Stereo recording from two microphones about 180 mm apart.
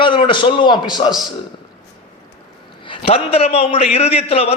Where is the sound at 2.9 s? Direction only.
30° left (ahead or behind).